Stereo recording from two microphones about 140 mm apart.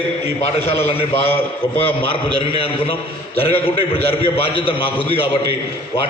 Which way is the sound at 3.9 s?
40° left (ahead or behind).